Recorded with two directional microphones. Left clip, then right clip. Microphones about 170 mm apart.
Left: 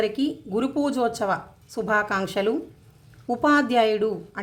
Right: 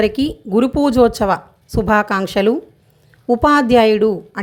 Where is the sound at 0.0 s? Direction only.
45° right (ahead or behind).